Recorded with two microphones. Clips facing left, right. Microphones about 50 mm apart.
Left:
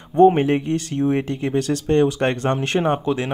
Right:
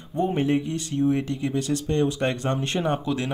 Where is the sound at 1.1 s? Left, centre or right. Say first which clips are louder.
Left 4 dB; left.